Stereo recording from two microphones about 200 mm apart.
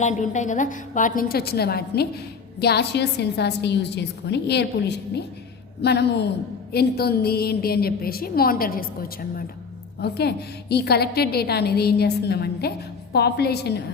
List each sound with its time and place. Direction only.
0.0 s a woman's voice: 35° left (ahead or behind); by 13.8 s 55° left (ahead or behind)